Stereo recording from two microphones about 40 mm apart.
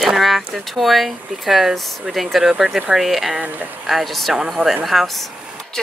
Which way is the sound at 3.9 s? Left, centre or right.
Centre.